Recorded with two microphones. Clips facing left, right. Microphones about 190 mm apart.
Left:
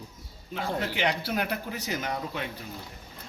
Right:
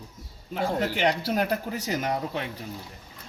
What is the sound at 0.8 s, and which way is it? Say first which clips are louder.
Speech: right 3 dB; 40° right (ahead or behind).